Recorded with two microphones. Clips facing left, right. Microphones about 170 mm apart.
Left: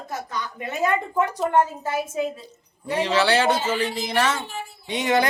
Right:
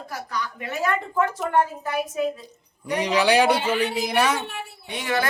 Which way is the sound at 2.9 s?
15° right (ahead or behind).